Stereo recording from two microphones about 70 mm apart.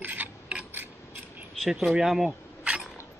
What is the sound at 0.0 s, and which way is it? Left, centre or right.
Filing, right.